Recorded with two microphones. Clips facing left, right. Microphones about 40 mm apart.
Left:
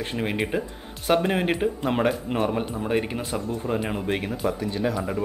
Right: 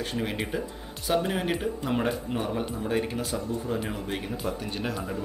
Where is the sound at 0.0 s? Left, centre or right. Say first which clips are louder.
Left 4 dB; left.